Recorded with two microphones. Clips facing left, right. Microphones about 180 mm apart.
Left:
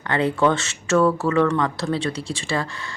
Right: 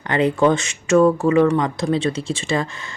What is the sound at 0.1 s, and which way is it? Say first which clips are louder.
Speech: right 3 dB; 20° right (ahead or behind).